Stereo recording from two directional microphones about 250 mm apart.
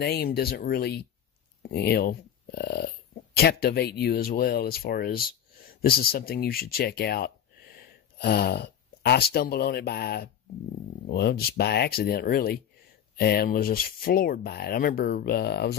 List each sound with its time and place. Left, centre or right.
0.0 s speech: left